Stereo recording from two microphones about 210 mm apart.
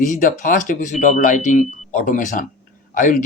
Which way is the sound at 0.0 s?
35° left (ahead or behind).